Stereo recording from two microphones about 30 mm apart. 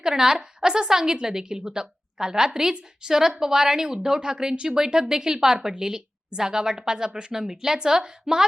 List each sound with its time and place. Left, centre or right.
0.1 s a woman's voice: right
7.4 s a woman's voice: centre